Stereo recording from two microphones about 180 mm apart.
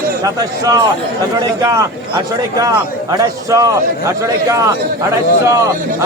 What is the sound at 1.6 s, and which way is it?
Speech, 20° right (ahead or behind).